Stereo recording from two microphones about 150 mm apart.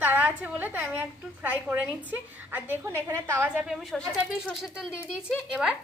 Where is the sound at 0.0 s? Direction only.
10° right (ahead or behind).